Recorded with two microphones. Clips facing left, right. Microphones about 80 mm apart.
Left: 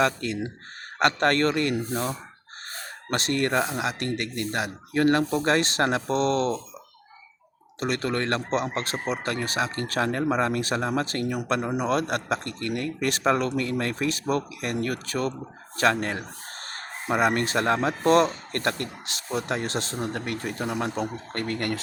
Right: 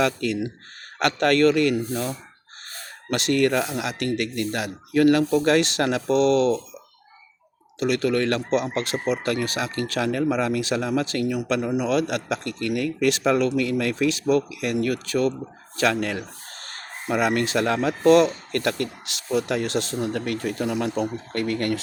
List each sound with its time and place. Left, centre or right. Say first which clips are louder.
0.0 s speech: right 2 dB; left
7.8 s speech: right 5 dB; left